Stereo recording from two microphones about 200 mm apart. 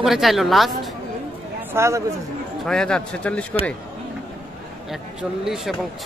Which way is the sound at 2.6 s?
5° left (ahead or behind).